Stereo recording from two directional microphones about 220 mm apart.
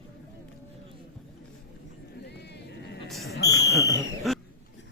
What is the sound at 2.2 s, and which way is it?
Vehicle, 50° left (ahead or behind).